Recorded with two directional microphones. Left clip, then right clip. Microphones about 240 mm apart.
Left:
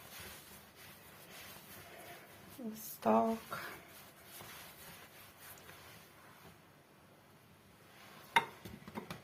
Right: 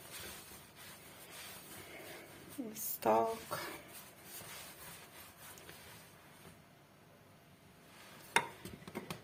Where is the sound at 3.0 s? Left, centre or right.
Right.